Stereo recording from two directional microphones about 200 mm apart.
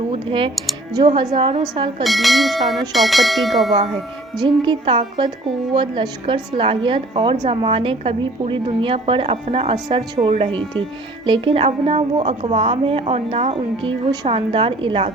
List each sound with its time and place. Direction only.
0.1 s a woman's voice: 25° right (ahead or behind)
2.0 s bell: centre (ahead or behind)
4.4 s a woman's voice: 25° right (ahead or behind)